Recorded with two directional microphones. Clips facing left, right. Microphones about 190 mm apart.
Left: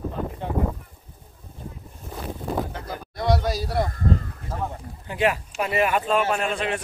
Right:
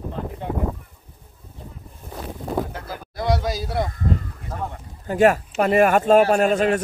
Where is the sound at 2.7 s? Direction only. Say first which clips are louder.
Even; centre (ahead or behind).